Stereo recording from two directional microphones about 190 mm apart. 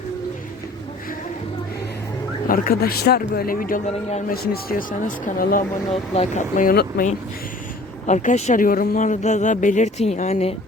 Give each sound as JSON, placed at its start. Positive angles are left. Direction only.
{"t": 2.5, "sound": "speech", "side_deg": 50}
{"t": 5.9, "sound": "speech", "side_deg": 35}
{"t": 8.0, "sound": "speech", "side_deg": 40}